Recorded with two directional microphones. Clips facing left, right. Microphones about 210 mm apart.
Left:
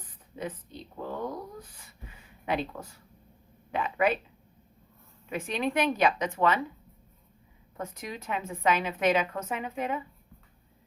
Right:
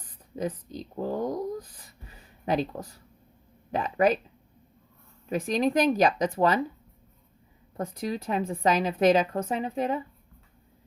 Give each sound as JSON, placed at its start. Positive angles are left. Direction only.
{"t": 0.3, "sound": "speech", "side_deg": -40}
{"t": 5.3, "sound": "speech", "side_deg": -40}
{"t": 7.8, "sound": "speech", "side_deg": -35}